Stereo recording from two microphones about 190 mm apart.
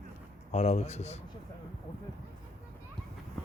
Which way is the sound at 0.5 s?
35° left (ahead or behind).